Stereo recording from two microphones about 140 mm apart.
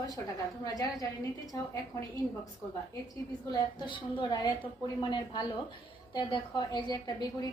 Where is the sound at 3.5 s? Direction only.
35° left (ahead or behind).